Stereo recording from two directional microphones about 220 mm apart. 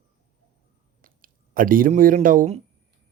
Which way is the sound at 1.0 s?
40° right (ahead or behind).